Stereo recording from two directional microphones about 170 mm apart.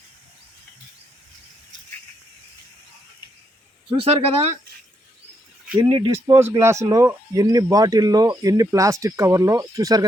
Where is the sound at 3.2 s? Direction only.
30° left (ahead or behind).